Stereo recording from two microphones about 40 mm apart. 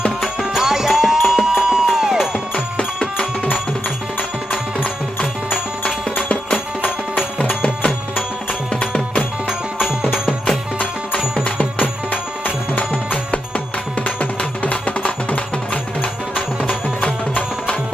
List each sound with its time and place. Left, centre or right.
0.5 s music: centre
2.7 s music: left
6.1 s music: left
8.7 s music: left
9.5 s music: centre
11.4 s music: left